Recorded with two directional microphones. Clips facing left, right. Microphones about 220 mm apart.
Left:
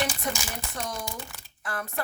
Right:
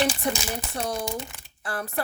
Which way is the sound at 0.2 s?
30° right (ahead or behind).